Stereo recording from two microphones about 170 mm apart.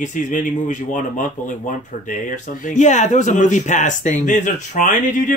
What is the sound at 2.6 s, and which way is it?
Speech, 45° left (ahead or behind).